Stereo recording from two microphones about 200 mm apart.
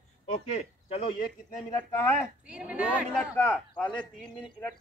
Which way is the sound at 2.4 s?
5° right (ahead or behind).